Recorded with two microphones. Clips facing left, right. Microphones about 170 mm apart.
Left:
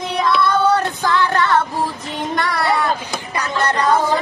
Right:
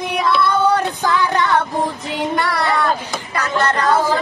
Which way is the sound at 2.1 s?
10° right (ahead or behind).